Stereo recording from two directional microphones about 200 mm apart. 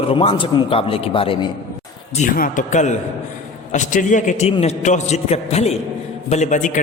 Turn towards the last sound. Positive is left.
turn(degrees=40)  # may be behind; listen again after turning